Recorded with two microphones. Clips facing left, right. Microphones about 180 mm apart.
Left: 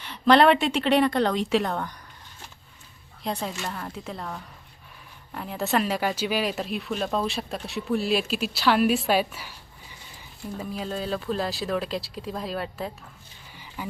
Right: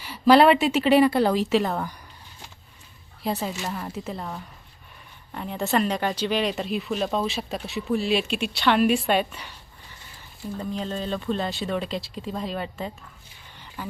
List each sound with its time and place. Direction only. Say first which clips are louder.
0.0 s speech: right 2 dB; 10° right (ahead or behind)
3.2 s speech: right 2 dB; 5° right (ahead or behind)
13.8 s speech: even; 10° left (ahead or behind)